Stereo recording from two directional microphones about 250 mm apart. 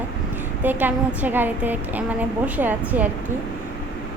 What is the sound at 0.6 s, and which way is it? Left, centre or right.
A woman's voice, centre.